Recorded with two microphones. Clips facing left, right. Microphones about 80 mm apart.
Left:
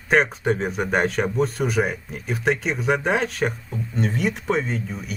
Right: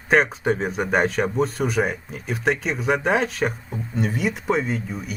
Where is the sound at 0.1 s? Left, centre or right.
Centre.